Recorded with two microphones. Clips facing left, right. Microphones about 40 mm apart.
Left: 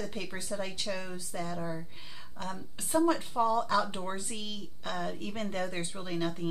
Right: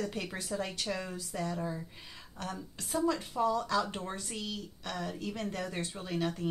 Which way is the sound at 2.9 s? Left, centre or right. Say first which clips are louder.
Left 4 dB; left.